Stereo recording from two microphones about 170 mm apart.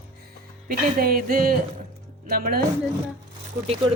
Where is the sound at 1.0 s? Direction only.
60° right (ahead or behind).